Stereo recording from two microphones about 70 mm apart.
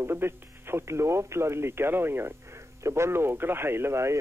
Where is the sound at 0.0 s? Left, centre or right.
Right.